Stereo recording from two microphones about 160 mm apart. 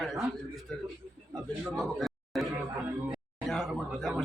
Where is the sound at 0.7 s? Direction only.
5° left (ahead or behind).